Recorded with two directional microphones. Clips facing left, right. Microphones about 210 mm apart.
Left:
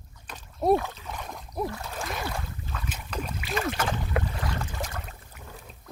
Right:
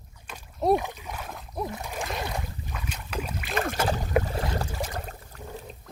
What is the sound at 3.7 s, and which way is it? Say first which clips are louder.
Boat: right 4 dB; 35° right (ahead or behind).